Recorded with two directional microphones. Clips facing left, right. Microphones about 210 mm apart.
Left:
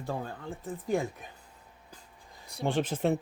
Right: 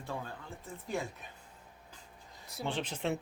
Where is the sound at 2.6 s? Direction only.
50° left (ahead or behind).